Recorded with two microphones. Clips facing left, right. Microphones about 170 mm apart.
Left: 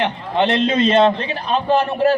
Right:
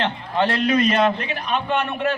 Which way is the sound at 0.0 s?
20° left (ahead or behind).